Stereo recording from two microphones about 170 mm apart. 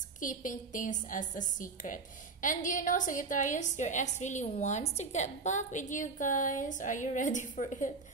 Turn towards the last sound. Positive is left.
turn(degrees=50)  # may be behind; listen again after turning